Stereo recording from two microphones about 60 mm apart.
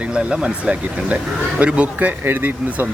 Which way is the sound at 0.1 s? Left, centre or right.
Centre.